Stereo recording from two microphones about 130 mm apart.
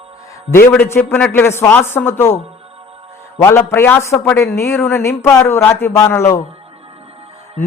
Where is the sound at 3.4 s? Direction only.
15° left (ahead or behind).